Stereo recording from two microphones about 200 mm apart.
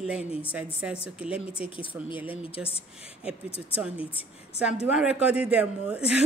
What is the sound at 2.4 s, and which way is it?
Speech, 30° left (ahead or behind).